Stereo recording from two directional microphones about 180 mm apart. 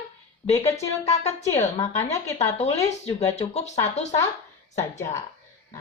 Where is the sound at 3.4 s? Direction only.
40° left (ahead or behind).